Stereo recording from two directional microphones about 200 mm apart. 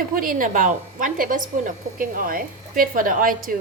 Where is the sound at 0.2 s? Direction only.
45° right (ahead or behind).